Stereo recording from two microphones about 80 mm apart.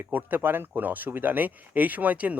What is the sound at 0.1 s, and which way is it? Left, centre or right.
Speech, right.